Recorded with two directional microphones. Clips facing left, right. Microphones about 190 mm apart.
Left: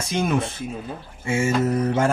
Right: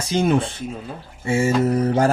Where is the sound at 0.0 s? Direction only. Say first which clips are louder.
Right 4 dB; 30° right (ahead or behind).